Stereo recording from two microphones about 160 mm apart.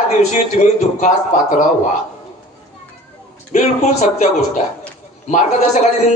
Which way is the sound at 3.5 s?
45° left (ahead or behind).